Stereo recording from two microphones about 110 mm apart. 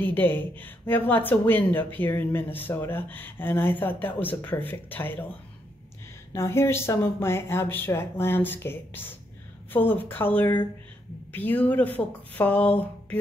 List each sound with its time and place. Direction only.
0.0 s speech: 15° left (ahead or behind)
6.3 s speech: 25° left (ahead or behind)